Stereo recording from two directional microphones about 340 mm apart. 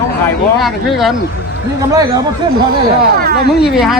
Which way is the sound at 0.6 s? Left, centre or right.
Centre.